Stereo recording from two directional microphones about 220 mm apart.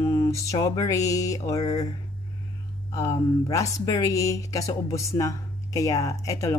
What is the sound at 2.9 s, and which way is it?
Speech, 15° left (ahead or behind).